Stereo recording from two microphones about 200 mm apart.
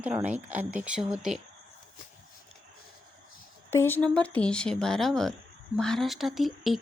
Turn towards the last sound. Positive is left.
turn(degrees=0)  # may be behind; listen again after turning